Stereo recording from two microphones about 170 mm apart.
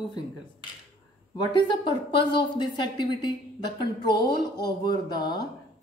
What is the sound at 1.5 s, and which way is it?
A woman's voice, 30° left (ahead or behind).